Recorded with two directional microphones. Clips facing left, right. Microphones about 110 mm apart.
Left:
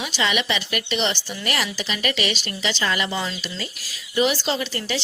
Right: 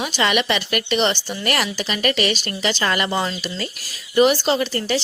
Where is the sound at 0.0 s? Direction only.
50° right (ahead or behind).